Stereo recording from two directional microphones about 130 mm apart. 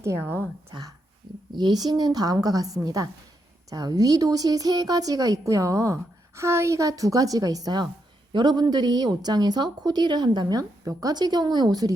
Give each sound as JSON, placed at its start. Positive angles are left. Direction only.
{"t": 0.0, "sound": "a woman's voice", "side_deg": -20}